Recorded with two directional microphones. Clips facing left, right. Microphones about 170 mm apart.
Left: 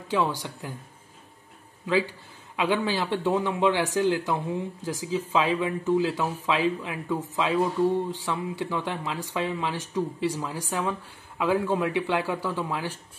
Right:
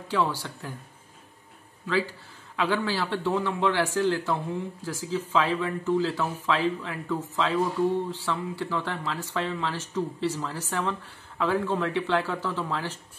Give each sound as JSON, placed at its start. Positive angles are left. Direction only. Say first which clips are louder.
{"t": 0.1, "sound": "speech", "louder": "left 1 dB", "side_deg": 15}
{"t": 2.5, "sound": "speech", "louder": "left 1 dB", "side_deg": 15}